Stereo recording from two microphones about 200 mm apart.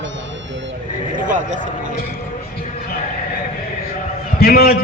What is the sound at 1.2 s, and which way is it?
Speech, 40° right (ahead or behind).